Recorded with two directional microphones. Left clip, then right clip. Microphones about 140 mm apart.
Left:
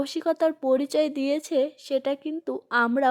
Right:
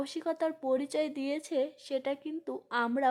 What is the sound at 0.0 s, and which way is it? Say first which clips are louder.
Speech: left 9 dB; 30° left (ahead or behind).